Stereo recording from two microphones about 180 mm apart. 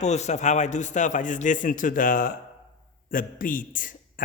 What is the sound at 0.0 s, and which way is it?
Speech, 40° left (ahead or behind).